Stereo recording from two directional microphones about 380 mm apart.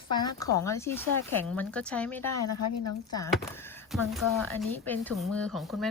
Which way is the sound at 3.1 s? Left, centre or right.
Centre.